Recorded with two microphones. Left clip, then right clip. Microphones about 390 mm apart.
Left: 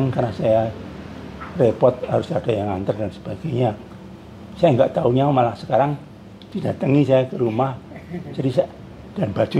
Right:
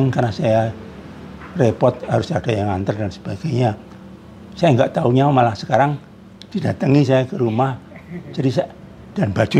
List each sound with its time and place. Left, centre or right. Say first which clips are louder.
0.1 s speech: right 1 dB; right